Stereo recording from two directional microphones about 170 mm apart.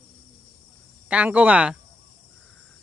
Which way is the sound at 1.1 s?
10° right (ahead or behind).